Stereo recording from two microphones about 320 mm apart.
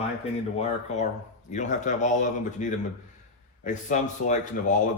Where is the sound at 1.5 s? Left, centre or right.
Left.